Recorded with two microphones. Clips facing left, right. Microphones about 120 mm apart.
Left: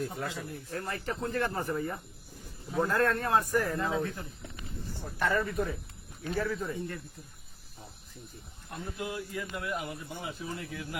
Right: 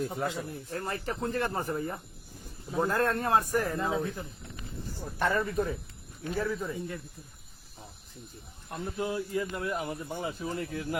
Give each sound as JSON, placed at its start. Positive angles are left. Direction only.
{"t": 0.0, "sound": "speech", "side_deg": -25}
{"t": 5.2, "sound": "speech", "side_deg": -30}
{"t": 6.3, "sound": "speech", "side_deg": -5}
{"t": 8.7, "sound": "speech", "side_deg": -35}